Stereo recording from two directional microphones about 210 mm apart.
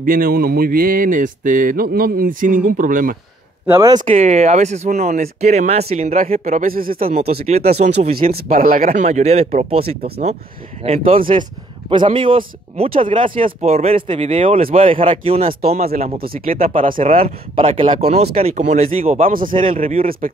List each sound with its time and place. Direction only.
0.0 s speech: 40° right (ahead or behind)
3.6 s speech: 15° right (ahead or behind)
4.0 s speech: 30° right (ahead or behind)
8.3 s speech: 45° right (ahead or behind); by 9.9 s 30° right (ahead or behind)
11.1 s speech: 25° right (ahead or behind)
16.8 s speech: 40° right (ahead or behind)
17.6 s speech: 25° right (ahead or behind)